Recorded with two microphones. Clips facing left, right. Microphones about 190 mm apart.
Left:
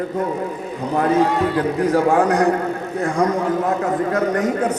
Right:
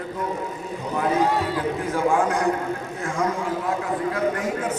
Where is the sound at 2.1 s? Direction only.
65° left (ahead or behind).